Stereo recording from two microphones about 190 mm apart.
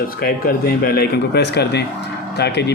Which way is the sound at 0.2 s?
50° left (ahead or behind).